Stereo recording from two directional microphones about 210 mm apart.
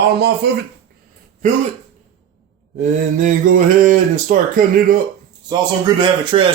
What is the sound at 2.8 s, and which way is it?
Speech, 40° right (ahead or behind).